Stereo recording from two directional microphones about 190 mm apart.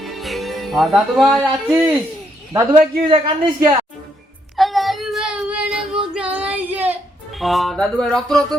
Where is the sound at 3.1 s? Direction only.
25° right (ahead or behind).